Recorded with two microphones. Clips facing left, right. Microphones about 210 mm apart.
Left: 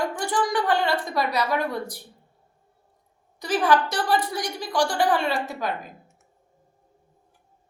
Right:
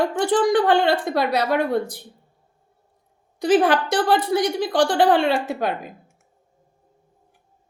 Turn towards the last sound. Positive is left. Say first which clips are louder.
# right 5 dB
turn(degrees=-60)  # may be behind; listen again after turning